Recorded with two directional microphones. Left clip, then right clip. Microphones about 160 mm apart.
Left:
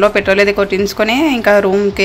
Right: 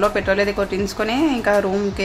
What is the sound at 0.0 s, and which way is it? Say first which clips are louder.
Speech: left 7 dB; 25° left (ahead or behind).